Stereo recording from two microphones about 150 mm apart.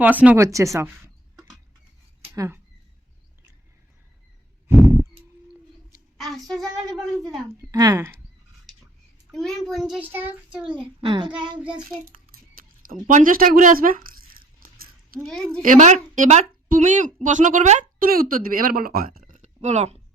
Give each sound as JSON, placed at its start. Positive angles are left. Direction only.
{"t": 0.0, "sound": "child singing", "side_deg": -10}
{"t": 0.4, "sound": "speech", "side_deg": -20}
{"t": 2.2, "sound": "a sound", "side_deg": -20}
{"t": 6.1, "sound": "a woman's voice", "side_deg": 0}
{"t": 7.4, "sound": "speech", "side_deg": -25}
{"t": 9.3, "sound": "a woman's voice", "side_deg": 0}
{"t": 10.1, "sound": "child singing", "side_deg": -15}
{"t": 11.0, "sound": "child singing", "side_deg": -35}
{"t": 12.5, "sound": "speech", "side_deg": -70}
{"t": 14.6, "sound": "coin", "side_deg": -70}
{"t": 15.6, "sound": "a woman's voice", "side_deg": -60}